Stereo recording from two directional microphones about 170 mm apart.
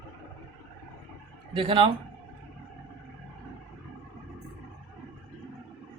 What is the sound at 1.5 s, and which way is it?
Speech, 30° right (ahead or behind).